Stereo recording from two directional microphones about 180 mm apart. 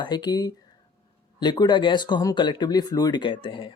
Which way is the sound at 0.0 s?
25° left (ahead or behind).